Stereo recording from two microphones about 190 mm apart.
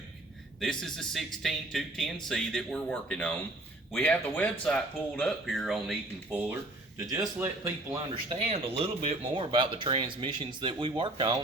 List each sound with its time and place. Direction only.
0.6 s speech: 5° left (ahead or behind)
7.1 s speech: 15° right (ahead or behind)
7.9 s speech: 30° right (ahead or behind)